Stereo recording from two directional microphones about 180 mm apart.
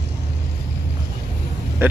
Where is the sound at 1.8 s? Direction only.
10° right (ahead or behind).